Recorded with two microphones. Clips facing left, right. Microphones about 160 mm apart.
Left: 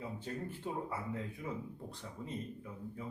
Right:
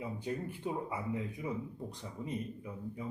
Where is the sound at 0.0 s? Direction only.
15° right (ahead or behind).